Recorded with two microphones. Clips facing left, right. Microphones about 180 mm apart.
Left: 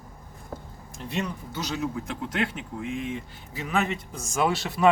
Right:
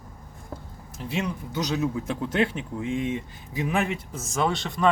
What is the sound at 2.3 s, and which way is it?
Speech, 25° right (ahead or behind).